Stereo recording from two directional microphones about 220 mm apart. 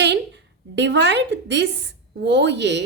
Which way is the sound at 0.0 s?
55° right (ahead or behind).